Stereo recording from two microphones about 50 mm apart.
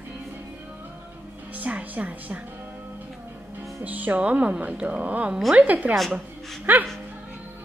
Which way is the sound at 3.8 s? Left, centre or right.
Right.